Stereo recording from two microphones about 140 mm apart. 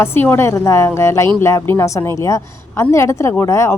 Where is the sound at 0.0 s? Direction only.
15° left (ahead or behind).